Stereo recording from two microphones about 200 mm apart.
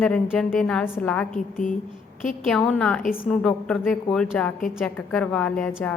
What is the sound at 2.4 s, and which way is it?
A woman's voice, centre (ahead or behind).